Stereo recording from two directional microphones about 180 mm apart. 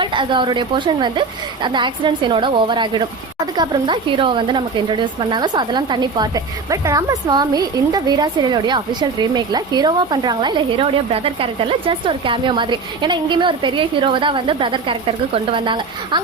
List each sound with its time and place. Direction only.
0.0 s a woman's voice: 25° right (ahead or behind)